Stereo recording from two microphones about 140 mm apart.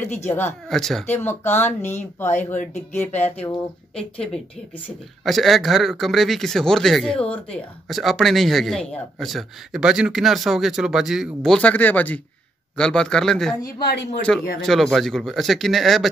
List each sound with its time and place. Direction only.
0.3 s speech: 15° left (ahead or behind)
0.7 s speech: centre (ahead or behind)
1.0 s speech: 15° left (ahead or behind)
2.2 s speech: 55° left (ahead or behind)
2.9 s speech: 15° left (ahead or behind); by 11.5 s 5° right (ahead or behind)
11.5 s speech: 10° left (ahead or behind)